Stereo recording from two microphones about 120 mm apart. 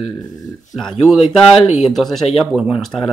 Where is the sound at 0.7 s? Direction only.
Centre (ahead or behind).